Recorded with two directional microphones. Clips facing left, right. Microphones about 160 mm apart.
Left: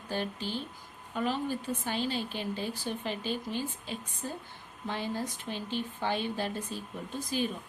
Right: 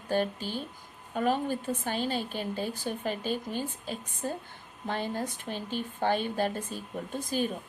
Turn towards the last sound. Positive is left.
turn(degrees=-50)  # may be behind; listen again after turning